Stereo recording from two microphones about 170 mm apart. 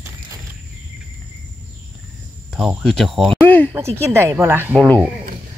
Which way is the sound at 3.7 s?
15° right (ahead or behind).